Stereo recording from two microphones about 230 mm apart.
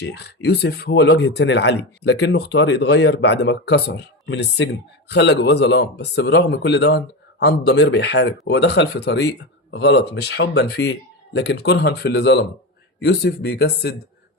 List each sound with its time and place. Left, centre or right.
0.0 s speech: left